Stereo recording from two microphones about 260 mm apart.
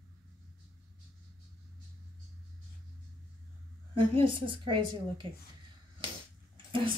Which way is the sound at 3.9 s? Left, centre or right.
Centre.